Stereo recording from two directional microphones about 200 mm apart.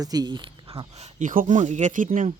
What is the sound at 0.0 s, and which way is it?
Speech, 20° right (ahead or behind).